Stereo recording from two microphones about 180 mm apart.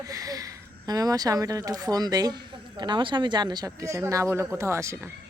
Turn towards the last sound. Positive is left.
turn(degrees=-15)  # may be behind; listen again after turning